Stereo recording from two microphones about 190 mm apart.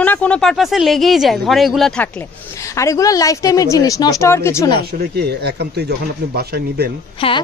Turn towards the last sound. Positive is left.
turn(degrees=30)  # may be behind; listen again after turning